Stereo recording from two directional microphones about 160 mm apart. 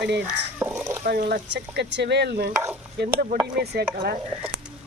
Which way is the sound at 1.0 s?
65° right (ahead or behind).